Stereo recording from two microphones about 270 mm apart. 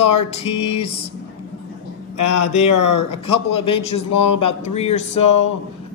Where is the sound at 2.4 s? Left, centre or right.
Left.